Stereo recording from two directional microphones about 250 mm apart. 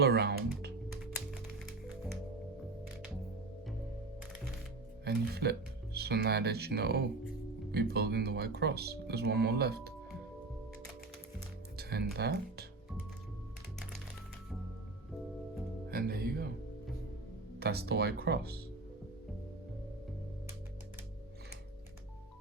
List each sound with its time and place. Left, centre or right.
0.0 s music: right
5.0 s speech: right
11.8 s speech: right
15.9 s music: right
17.6 s speech: right